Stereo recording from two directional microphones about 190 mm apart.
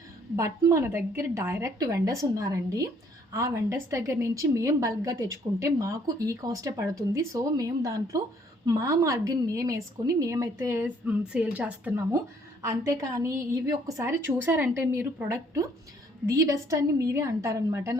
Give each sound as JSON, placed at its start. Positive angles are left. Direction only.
{"t": 0.3, "sound": "a woman's voice", "side_deg": -15}